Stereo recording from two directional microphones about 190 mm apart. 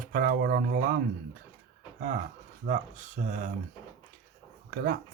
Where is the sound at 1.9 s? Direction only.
45° right (ahead or behind).